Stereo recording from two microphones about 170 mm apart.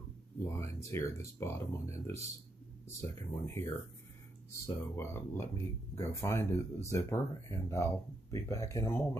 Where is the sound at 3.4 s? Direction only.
15° left (ahead or behind).